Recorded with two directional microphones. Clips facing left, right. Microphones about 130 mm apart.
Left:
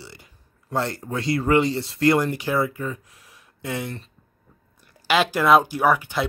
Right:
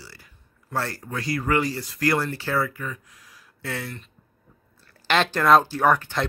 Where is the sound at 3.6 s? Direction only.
15° left (ahead or behind).